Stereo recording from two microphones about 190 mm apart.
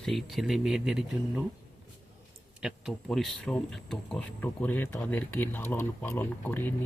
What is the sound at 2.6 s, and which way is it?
Speech, centre (ahead or behind).